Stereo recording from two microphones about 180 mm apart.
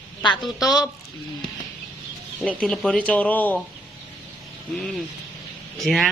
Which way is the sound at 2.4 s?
5° left (ahead or behind).